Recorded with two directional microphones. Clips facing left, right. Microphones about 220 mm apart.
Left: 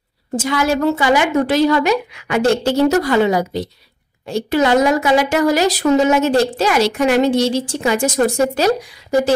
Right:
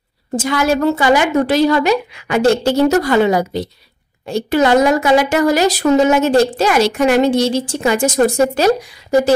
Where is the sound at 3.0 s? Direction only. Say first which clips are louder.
Right 1 dB; 50° right (ahead or behind).